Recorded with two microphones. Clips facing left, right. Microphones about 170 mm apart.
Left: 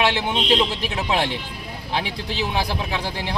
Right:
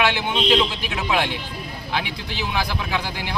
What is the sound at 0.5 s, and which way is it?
Speech, 35° left (ahead or behind).